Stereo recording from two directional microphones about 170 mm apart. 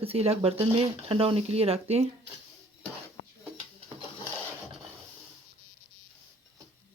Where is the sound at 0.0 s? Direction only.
35° right (ahead or behind).